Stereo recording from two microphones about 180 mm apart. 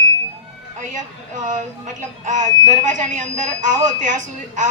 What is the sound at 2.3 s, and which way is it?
A woman's voice, 45° right (ahead or behind).